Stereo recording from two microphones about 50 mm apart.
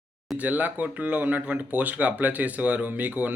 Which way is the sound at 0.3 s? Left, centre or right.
Right.